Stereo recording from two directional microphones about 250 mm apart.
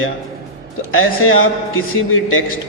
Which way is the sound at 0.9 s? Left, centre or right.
Left.